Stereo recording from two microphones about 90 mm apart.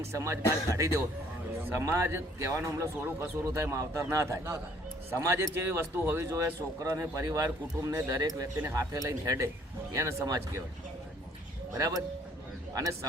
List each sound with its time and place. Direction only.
0.1 s speech: 35° right (ahead or behind)
11.7 s speech: 40° right (ahead or behind)